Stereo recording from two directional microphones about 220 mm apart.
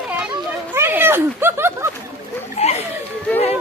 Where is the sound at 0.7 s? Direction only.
10° right (ahead or behind).